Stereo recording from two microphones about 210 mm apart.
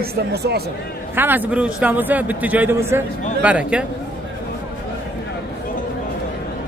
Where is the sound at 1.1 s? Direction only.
10° right (ahead or behind).